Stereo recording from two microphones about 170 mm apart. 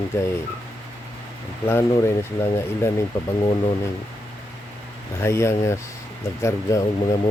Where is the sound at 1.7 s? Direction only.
15° left (ahead or behind).